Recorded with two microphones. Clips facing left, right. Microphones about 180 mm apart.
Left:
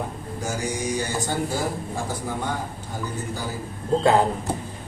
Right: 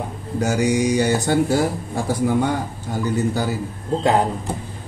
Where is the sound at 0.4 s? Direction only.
70° right (ahead or behind).